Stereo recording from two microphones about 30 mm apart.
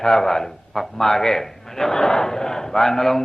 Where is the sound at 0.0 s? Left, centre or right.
Centre.